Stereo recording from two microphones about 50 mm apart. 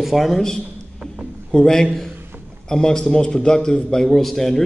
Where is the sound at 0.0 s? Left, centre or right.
Centre.